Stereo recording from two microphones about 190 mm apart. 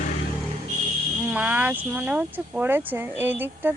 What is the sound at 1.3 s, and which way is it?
Speech, 10° right (ahead or behind).